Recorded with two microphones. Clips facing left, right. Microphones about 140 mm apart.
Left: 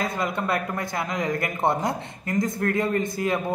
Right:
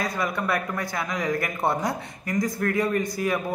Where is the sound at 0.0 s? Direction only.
25° left (ahead or behind).